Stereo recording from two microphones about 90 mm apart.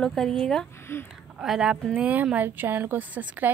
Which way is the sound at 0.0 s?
5° left (ahead or behind).